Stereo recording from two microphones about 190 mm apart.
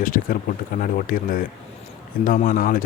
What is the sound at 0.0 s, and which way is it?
Speech, 45° left (ahead or behind).